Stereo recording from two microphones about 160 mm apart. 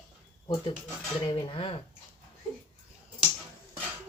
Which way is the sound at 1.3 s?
30° left (ahead or behind).